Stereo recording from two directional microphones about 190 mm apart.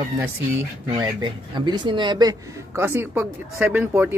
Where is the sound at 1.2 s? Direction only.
25° right (ahead or behind).